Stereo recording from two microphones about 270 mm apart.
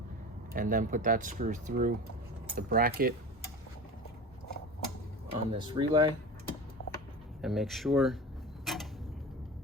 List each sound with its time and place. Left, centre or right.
0.5 s speech: right
5.3 s speech: centre
7.4 s speech: centre
8.6 s a sound: centre